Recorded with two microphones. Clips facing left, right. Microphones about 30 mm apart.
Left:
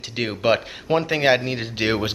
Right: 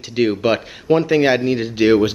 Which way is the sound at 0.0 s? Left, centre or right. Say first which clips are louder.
Right 5 dB; centre.